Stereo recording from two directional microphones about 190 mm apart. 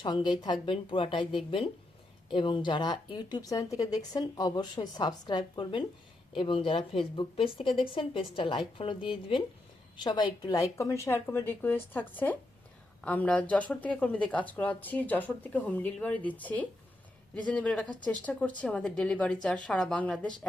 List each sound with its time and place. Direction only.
0.0 s a woman's voice: 25° left (ahead or behind); by 20.5 s 5° left (ahead or behind)